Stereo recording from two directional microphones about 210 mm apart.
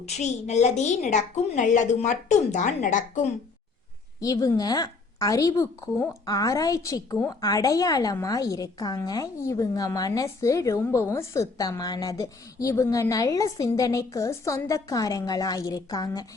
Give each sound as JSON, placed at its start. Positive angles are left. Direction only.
{"t": 0.0, "sound": "a woman's voice", "side_deg": 30}
{"t": 4.2, "sound": "a woman's voice", "side_deg": 15}